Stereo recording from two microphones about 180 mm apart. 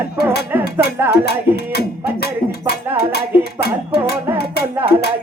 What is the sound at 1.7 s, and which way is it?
Speech, 60° left (ahead or behind).